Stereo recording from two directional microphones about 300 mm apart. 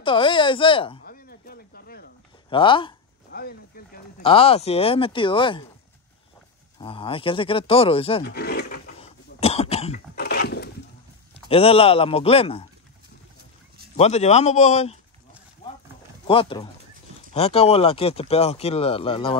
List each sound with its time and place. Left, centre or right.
0.0 s speech: centre
1.0 s a sound: left
2.5 s speech: centre
3.3 s a sound: left
4.2 s speech: centre
6.8 s speech: centre
8.2 s speech: left
9.0 s cough: left
11.3 s speech: centre
13.9 s speech: left
16.3 s speech: centre